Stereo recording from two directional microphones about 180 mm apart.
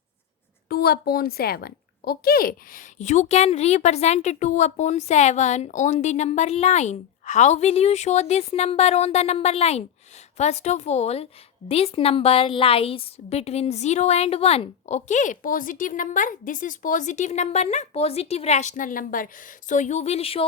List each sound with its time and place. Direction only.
0.7 s a woman's voice: 60° left (ahead or behind); by 20.4 s 35° left (ahead or behind)